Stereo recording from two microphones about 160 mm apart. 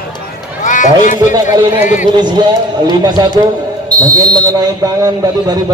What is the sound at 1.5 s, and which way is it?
Speech, 15° right (ahead or behind).